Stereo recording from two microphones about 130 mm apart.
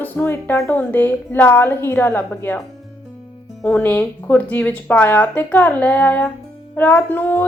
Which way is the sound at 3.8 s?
15° left (ahead or behind).